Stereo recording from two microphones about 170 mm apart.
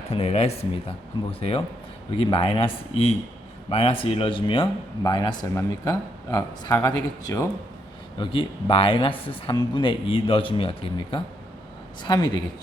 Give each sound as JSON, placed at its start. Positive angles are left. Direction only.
{"t": 0.1, "sound": "speech", "side_deg": 40}